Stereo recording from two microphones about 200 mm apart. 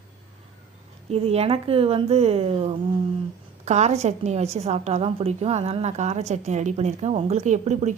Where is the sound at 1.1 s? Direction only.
30° right (ahead or behind).